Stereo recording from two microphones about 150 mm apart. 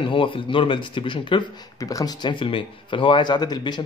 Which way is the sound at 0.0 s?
35° left (ahead or behind).